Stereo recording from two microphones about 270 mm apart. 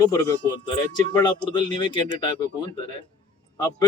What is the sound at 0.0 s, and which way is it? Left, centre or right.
Speech, centre.